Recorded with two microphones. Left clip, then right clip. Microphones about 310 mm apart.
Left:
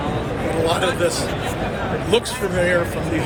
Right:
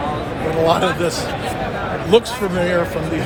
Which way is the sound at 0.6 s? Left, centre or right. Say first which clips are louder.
Right 3 dB; centre.